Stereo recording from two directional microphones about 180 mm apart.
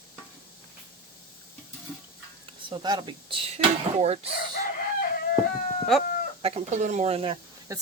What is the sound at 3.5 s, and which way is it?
Speech, 35° right (ahead or behind).